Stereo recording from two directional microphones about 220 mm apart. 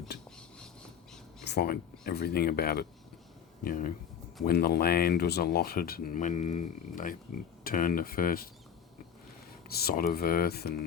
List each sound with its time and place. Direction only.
1.5 s speech: 45° left (ahead or behind)
9.6 s speech: 45° left (ahead or behind)